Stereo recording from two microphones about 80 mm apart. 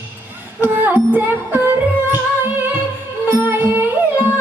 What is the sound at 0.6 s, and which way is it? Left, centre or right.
Music, right.